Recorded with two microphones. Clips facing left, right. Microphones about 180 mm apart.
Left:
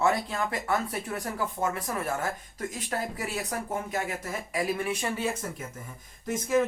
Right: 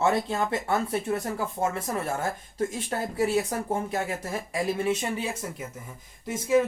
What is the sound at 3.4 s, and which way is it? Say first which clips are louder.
Speech: right 5 dB; 30° right (ahead or behind).